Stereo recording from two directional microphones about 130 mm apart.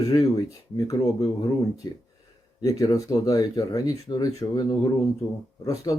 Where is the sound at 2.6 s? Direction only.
25° left (ahead or behind).